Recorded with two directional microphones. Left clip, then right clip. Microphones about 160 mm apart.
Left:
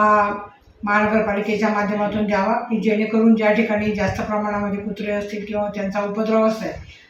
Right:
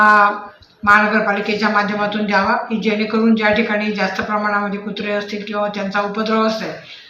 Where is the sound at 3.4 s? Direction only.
15° left (ahead or behind).